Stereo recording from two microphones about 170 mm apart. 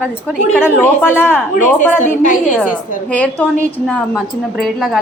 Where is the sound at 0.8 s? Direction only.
10° left (ahead or behind).